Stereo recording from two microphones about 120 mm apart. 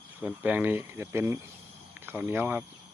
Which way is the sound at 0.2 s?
15° right (ahead or behind).